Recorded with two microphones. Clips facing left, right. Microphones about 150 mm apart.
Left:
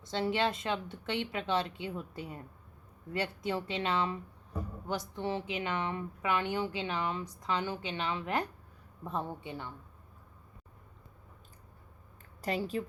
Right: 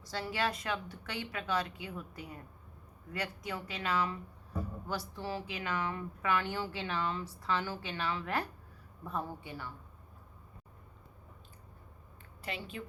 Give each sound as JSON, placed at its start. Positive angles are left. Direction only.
{"t": 0.0, "sound": "speech", "side_deg": 25}
{"t": 12.4, "sound": "a woman's voice", "side_deg": 40}